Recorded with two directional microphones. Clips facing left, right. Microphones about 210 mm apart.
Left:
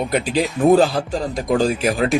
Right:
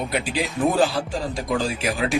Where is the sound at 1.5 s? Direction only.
40° left (ahead or behind).